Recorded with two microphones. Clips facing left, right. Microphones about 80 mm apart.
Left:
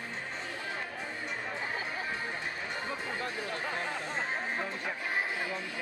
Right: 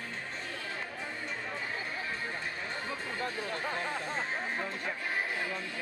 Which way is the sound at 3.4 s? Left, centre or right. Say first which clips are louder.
Even; centre.